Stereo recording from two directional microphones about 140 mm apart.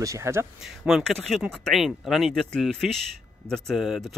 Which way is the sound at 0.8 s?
Centre (ahead or behind).